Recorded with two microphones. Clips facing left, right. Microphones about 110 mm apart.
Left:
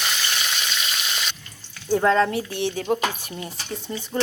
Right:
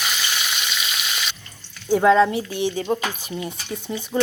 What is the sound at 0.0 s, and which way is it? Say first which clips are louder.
Frying: right 1 dB; 5° right (ahead or behind).